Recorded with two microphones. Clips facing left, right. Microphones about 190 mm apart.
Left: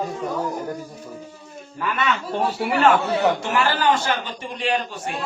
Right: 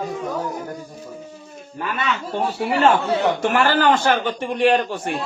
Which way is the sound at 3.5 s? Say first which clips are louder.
Right 3 dB; 55° right (ahead or behind).